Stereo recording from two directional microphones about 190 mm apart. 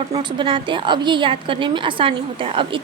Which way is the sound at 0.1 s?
25° right (ahead or behind).